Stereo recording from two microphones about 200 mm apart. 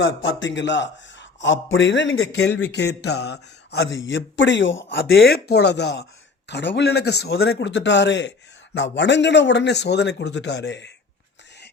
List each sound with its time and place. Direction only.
0.2 s a man's voice: 70° left (ahead or behind)